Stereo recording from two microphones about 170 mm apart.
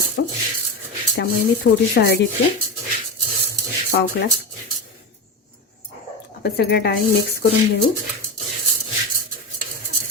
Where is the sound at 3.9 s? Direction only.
70° left (ahead or behind).